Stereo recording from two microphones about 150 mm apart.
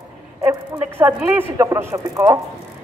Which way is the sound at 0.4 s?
15° right (ahead or behind).